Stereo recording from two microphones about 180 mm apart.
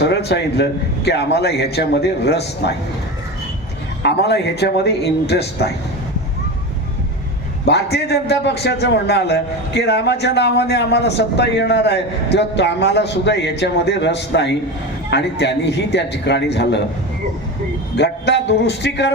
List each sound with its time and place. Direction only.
0.0 s a man's voice: 65° left (ahead or behind)
4.0 s a man's voice: 65° left (ahead or behind)
7.6 s a man's voice: 65° left (ahead or behind)
17.9 s a man's voice: 70° left (ahead or behind)